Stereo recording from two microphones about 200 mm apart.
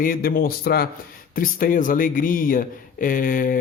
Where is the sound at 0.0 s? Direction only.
45° left (ahead or behind).